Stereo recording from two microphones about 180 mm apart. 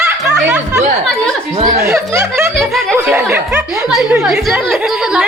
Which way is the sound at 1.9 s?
15° right (ahead or behind).